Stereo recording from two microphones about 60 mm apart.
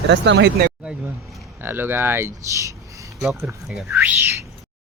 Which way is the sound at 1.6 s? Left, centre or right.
Right.